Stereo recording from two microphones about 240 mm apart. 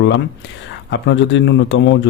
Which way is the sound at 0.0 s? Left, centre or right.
Left.